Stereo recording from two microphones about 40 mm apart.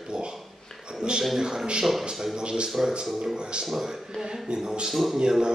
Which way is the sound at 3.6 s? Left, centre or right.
Centre.